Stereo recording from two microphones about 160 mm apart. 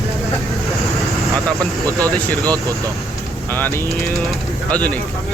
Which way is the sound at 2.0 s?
10° left (ahead or behind).